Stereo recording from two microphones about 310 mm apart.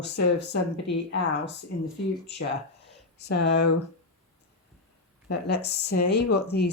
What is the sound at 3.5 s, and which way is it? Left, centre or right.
Speech, left.